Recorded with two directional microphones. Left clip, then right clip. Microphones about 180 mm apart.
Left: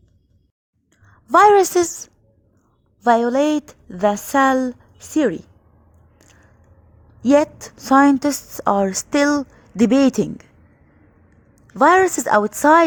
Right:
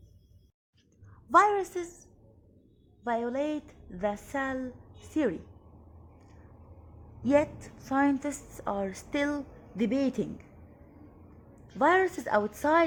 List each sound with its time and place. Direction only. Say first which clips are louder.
1.0 s a woman's voice: left 11 dB; 45° left (ahead or behind); by 4.7 s 60° left (ahead or behind)
5.1 s a woman's voice: left 11 dB; 45° left (ahead or behind)
7.2 s a woman's voice: left 10 dB; 40° left (ahead or behind)
11.8 s a woman's voice: left 11 dB; 40° left (ahead or behind)